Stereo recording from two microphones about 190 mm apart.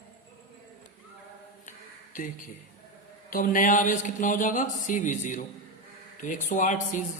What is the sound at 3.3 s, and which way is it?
A man's voice, 45° left (ahead or behind).